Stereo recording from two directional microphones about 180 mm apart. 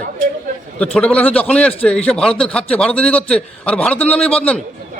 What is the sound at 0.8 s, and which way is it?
A man's voice, 5° left (ahead or behind).